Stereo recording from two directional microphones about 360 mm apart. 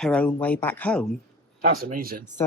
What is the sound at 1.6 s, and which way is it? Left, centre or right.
Speech, right.